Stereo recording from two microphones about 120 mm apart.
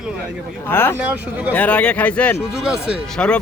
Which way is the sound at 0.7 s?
20° left (ahead or behind).